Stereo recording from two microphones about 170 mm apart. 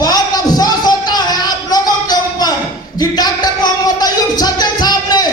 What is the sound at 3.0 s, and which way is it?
Music, 25° left (ahead or behind).